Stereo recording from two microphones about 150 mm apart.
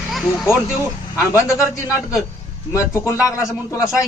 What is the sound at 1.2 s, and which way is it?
Speech, 20° left (ahead or behind).